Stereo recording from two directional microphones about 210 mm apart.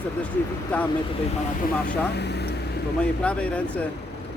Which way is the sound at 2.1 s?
50° left (ahead or behind).